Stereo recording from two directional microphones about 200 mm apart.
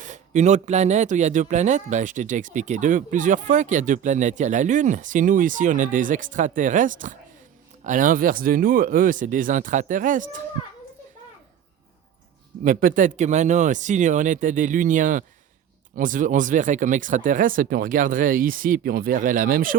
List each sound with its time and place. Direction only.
0.0 s speech: 35° right (ahead or behind)
12.6 s speech: 40° right (ahead or behind)